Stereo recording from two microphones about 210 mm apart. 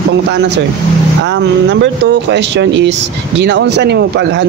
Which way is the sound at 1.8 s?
55° right (ahead or behind).